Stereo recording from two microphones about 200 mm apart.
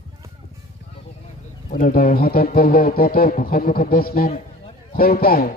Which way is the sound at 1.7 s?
45° left (ahead or behind).